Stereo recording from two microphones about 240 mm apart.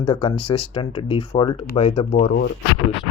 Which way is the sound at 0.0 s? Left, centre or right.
Left.